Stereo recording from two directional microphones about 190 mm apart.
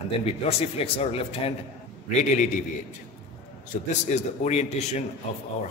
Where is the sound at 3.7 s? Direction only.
45° left (ahead or behind).